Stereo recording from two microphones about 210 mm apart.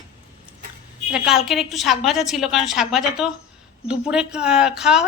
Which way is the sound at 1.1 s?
5° right (ahead or behind).